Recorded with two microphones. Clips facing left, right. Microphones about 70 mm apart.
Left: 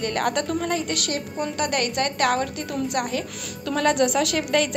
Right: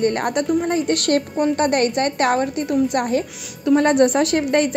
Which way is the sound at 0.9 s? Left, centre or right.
Right.